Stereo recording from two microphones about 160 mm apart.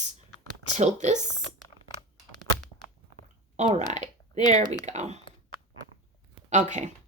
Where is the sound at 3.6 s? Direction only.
45° right (ahead or behind).